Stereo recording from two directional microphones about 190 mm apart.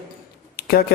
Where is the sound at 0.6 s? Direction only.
55° left (ahead or behind).